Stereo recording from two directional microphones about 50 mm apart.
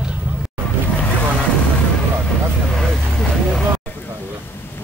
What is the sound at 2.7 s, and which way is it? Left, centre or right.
Vehicle, centre.